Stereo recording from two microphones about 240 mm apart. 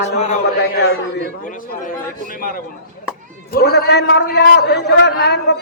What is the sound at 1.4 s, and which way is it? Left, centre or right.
Speech, left.